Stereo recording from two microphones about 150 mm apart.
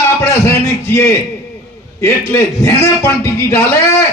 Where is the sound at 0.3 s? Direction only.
20° left (ahead or behind).